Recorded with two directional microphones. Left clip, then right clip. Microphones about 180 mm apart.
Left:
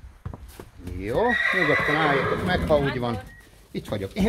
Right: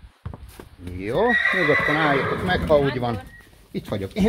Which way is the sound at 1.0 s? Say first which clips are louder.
Right 3 dB; 45° right (ahead or behind).